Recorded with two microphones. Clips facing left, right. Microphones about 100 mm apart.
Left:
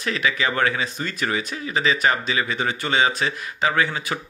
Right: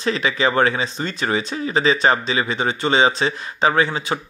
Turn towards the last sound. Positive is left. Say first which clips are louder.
# right 4 dB
turn(degrees=-25)  # may be behind; listen again after turning